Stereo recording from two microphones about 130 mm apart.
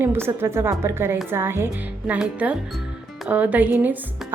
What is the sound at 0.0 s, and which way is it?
A woman's voice, 20° right (ahead or behind).